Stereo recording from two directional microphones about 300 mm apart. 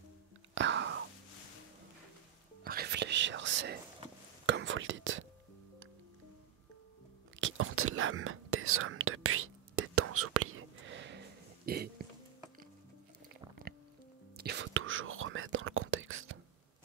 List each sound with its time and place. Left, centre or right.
0.6 s whispering: right
2.6 s whispering: right
7.3 s whispering: right
13.3 s biting: right
14.3 s whispering: right